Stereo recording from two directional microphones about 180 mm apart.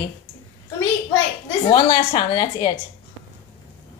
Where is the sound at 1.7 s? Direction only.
30° left (ahead or behind).